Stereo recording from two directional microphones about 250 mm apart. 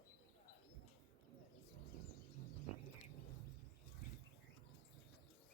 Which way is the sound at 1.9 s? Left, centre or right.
Left.